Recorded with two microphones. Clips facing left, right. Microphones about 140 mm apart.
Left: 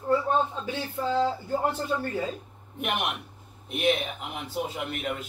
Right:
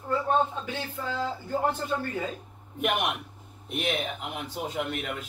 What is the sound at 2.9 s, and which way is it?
A man's voice, centre (ahead or behind).